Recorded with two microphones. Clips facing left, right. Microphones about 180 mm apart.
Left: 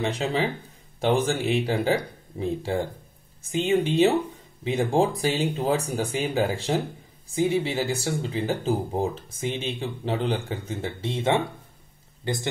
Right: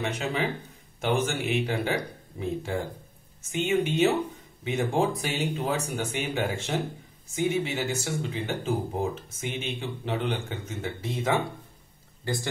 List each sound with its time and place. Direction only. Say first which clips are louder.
0.0 s speech: left 3 dB; 30° left (ahead or behind)